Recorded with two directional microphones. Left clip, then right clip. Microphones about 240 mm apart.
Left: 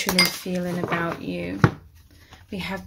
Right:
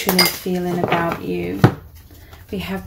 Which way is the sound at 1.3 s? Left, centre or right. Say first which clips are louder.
Right 7 dB; left.